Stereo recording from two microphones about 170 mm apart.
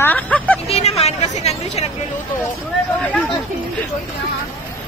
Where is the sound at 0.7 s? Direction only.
35° left (ahead or behind).